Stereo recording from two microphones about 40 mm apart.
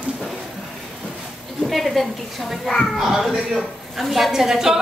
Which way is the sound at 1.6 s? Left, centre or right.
Centre.